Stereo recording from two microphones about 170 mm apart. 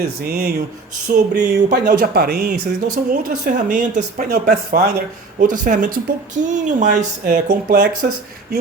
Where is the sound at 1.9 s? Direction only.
65° right (ahead or behind).